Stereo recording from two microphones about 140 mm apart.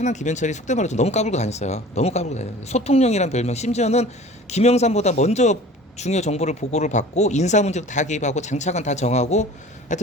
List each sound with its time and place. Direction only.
0.0 s speech: 55° left (ahead or behind)